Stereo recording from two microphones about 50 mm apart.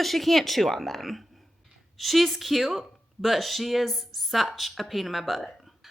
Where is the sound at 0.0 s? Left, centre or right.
Centre.